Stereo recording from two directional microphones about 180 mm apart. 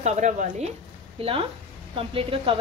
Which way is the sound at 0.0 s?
40° right (ahead or behind).